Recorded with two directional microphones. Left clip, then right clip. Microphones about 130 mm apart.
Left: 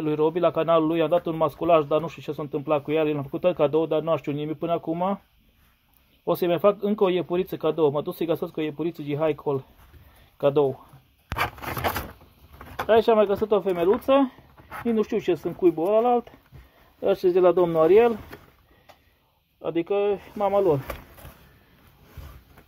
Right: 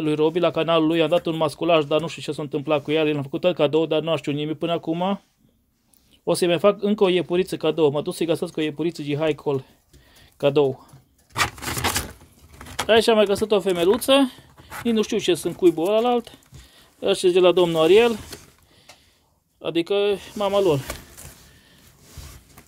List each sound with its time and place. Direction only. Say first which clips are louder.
0.0 s speech: right 2 dB; 30° right (ahead or behind)
6.2 s speech: right 2 dB; 30° right (ahead or behind)
12.8 s speech: right 2 dB; 25° right (ahead or behind)
19.6 s speech: right 3 dB; 20° right (ahead or behind)